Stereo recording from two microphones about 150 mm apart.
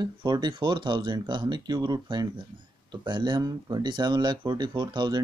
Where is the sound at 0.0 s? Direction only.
30° right (ahead or behind).